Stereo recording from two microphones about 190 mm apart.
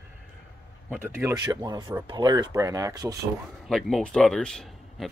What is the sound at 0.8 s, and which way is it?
Speech, 10° right (ahead or behind).